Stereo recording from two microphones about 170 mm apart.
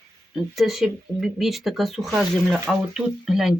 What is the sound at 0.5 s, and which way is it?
Speech, centre (ahead or behind).